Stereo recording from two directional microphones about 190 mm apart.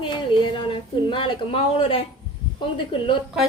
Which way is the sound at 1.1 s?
30° left (ahead or behind).